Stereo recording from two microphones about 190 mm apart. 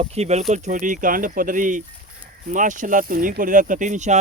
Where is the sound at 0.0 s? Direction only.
35° right (ahead or behind).